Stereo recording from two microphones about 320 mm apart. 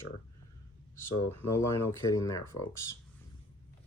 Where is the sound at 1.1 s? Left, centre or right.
Left.